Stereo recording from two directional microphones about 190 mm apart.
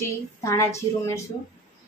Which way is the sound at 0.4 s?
15° left (ahead or behind).